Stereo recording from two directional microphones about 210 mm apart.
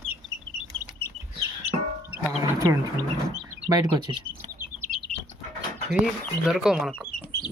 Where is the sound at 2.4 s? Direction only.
15° right (ahead or behind).